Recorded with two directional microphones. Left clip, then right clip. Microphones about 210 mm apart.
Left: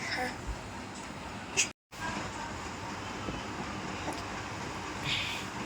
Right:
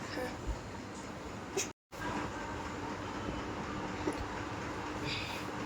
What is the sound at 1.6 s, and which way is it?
Vehicle, 20° right (ahead or behind).